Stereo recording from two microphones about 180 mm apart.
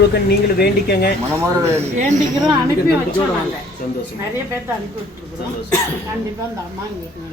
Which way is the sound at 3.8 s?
55° left (ahead or behind).